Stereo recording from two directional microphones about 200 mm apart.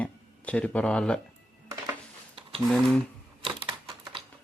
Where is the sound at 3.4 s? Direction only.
25° right (ahead or behind).